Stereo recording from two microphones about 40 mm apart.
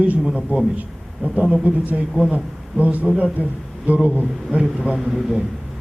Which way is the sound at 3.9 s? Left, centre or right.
Right.